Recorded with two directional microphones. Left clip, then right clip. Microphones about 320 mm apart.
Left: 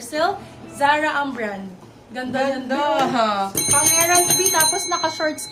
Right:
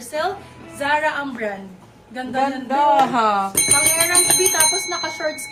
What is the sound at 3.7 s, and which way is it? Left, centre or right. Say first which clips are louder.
Speech: left 3 dB; right.